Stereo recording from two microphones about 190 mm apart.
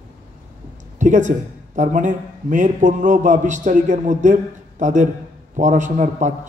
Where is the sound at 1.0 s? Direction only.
40° right (ahead or behind).